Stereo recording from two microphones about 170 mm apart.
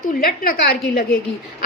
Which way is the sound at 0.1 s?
60° left (ahead or behind).